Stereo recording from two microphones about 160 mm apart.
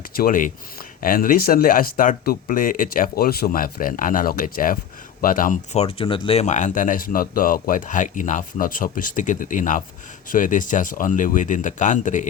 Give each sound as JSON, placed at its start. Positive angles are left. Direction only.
{"t": 0.1, "sound": "speech", "side_deg": 60}
{"t": 5.7, "sound": "speech", "side_deg": 35}